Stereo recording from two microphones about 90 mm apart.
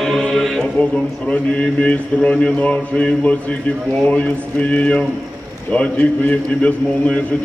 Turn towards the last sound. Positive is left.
turn(degrees=15)  # may be behind; listen again after turning